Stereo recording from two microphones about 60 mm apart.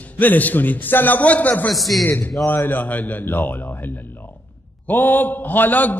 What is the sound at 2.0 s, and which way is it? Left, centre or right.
A man's voice, left.